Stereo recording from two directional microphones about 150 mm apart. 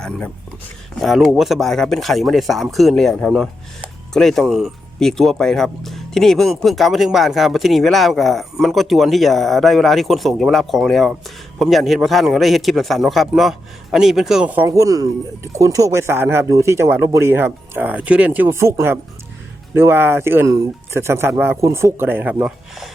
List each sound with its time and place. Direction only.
1.0 s speech: centre (ahead or behind)